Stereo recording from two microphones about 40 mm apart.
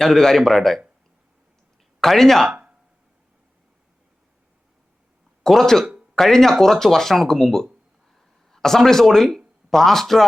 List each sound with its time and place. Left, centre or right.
0.0 s speech: centre
2.0 s speech: centre
2.5 s a sound: right
5.4 s speech: centre